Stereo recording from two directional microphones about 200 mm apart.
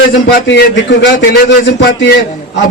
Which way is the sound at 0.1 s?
60° left (ahead or behind).